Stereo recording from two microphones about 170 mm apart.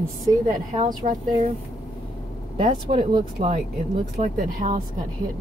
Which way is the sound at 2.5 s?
45° right (ahead or behind).